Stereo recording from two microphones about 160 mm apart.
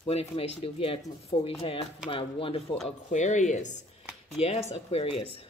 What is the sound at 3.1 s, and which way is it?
Speech, 50° left (ahead or behind).